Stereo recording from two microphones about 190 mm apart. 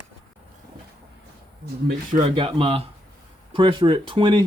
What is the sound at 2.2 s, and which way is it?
Speech, 30° right (ahead or behind).